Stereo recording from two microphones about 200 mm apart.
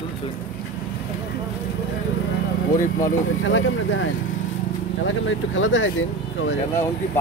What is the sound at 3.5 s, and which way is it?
Speech, 70° left (ahead or behind).